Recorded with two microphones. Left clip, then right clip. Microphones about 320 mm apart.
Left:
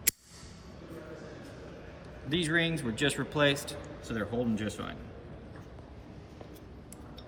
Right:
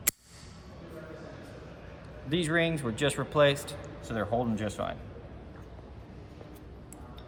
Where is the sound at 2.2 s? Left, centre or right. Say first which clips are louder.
Right 1 dB; right.